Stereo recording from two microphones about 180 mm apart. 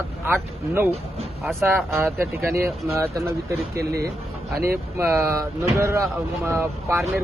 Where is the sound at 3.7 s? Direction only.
60° right (ahead or behind).